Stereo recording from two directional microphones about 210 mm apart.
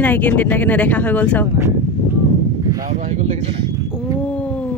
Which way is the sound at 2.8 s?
35° right (ahead or behind).